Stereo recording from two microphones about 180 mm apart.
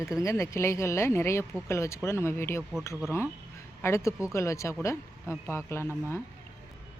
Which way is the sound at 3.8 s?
15° left (ahead or behind).